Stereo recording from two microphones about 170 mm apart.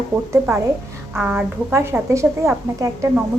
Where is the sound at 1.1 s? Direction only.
10° right (ahead or behind).